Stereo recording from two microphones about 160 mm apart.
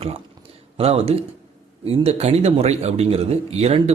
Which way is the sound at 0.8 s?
40° right (ahead or behind).